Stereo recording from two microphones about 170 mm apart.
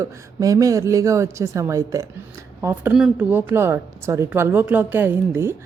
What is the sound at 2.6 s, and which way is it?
A woman's voice, 10° right (ahead or behind).